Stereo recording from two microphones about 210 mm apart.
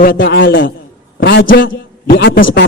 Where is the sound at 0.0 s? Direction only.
45° left (ahead or behind); by 0.7 s 60° left (ahead or behind).